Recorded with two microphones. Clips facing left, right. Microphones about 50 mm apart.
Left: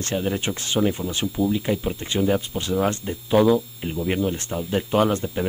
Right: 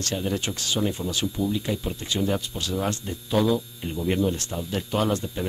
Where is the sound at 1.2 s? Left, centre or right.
Centre.